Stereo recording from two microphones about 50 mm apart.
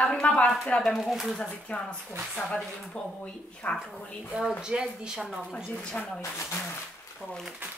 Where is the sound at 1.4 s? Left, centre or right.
Centre.